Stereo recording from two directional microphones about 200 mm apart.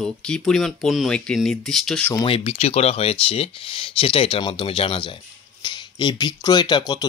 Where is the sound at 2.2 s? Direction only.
25° left (ahead or behind).